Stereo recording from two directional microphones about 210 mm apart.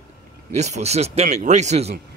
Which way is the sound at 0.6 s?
30° right (ahead or behind).